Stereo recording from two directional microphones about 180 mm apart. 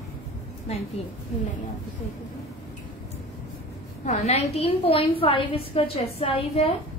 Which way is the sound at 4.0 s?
40° left (ahead or behind).